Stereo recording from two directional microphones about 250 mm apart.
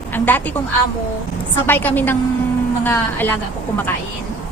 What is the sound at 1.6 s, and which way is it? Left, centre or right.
Speech, centre.